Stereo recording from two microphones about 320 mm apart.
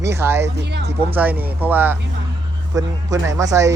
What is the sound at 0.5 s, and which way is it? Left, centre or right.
Speech, right.